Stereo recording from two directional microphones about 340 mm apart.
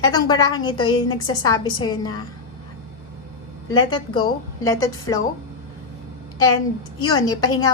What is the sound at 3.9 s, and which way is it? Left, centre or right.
A woman's voice, centre.